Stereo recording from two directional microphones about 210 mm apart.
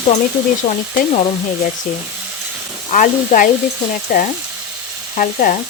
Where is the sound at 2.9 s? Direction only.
40° left (ahead or behind).